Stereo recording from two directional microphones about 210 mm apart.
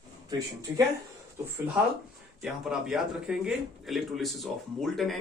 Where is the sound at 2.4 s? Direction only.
Centre (ahead or behind).